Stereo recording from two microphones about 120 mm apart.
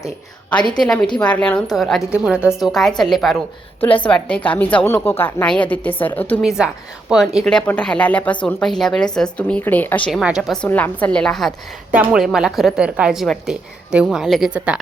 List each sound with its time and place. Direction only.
0.8 s a woman's voice: 5° left (ahead or behind)
4.0 s a woman's voice: 10° left (ahead or behind)
6.4 s a woman's voice: 5° right (ahead or behind)
7.7 s a woman's voice: 10° left (ahead or behind)
10.1 s a woman's voice: 5° right (ahead or behind)
10.6 s a woman's voice: 15° left (ahead or behind); by 14.8 s 10° right (ahead or behind)